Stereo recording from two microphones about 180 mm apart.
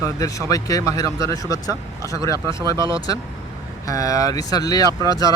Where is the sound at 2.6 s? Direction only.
25° right (ahead or behind).